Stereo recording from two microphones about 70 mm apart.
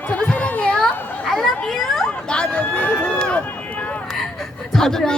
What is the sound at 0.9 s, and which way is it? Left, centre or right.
Children playing, left.